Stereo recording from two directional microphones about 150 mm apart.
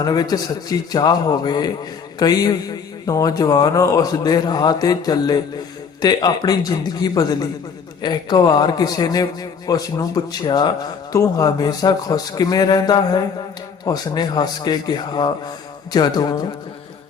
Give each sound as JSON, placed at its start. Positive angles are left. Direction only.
{"t": 0.0, "sound": "a man's voice", "side_deg": 25}